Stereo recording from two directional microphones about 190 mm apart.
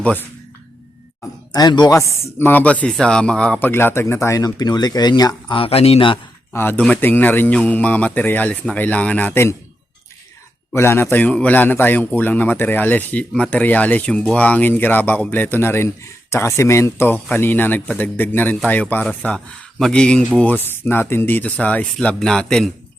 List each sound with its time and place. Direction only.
0.0 s a man's voice: 10° left (ahead or behind)
1.5 s a man's voice: 20° left (ahead or behind)
6.5 s a man's voice: 10° left (ahead or behind)
10.7 s a man's voice: 10° left (ahead or behind)